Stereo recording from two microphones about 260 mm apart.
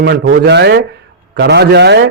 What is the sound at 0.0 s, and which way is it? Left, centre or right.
A man's voice, right.